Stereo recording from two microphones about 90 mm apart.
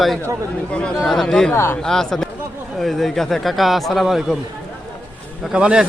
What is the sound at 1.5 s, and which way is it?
Speech, 25° left (ahead or behind).